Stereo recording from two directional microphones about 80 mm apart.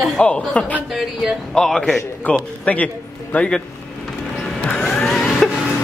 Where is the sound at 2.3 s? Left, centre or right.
Centre.